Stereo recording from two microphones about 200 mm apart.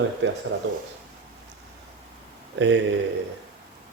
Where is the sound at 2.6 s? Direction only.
60° right (ahead or behind).